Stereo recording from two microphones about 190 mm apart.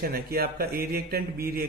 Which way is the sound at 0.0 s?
55° right (ahead or behind).